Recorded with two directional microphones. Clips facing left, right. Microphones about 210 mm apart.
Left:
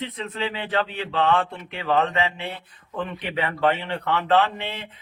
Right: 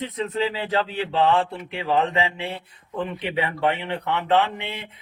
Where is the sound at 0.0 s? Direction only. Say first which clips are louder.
Right 4 dB; 35° right (ahead or behind).